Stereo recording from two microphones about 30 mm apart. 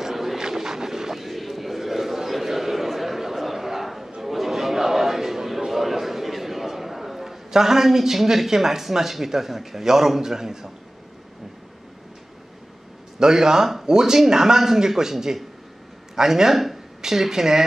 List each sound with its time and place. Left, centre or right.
0.1 s vehicle: centre
0.4 s a sound: centre
1.2 s a sound: centre
4.2 s chatter: centre
5.7 s a man's voice: centre
13.2 s a man's voice: centre